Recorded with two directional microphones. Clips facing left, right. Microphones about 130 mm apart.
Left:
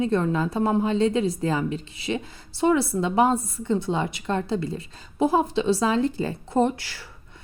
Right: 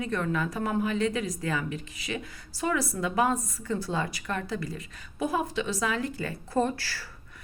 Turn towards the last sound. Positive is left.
turn(degrees=20)  # may be behind; listen again after turning